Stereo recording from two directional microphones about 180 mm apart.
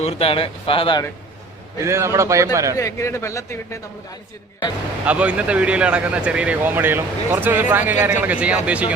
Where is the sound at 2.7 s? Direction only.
15° left (ahead or behind).